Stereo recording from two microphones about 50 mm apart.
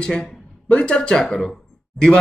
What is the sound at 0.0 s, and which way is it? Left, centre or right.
Speech, centre.